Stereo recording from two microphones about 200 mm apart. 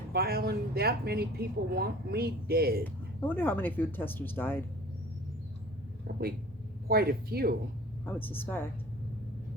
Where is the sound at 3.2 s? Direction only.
10° left (ahead or behind).